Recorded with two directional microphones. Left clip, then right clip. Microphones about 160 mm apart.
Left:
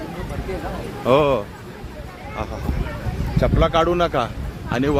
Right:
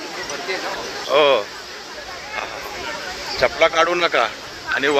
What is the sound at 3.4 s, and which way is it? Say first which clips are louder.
Speech: right 2 dB; 15° left (ahead or behind).